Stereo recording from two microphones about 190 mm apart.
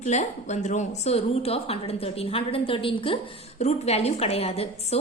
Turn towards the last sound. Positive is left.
turn(degrees=30)  # may be behind; listen again after turning